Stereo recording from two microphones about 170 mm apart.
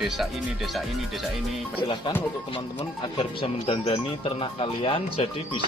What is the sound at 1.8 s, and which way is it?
Speech, 30° left (ahead or behind).